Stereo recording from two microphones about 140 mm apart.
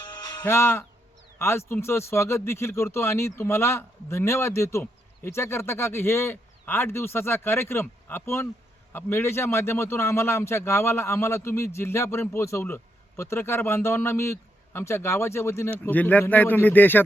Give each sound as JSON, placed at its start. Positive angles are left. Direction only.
{"t": 0.4, "sound": "a man's voice", "side_deg": 15}